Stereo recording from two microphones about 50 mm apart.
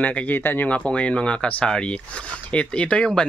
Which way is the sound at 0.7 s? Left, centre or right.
Left.